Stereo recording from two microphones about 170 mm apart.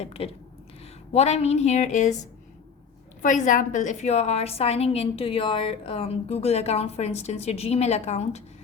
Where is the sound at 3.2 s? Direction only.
50° left (ahead or behind).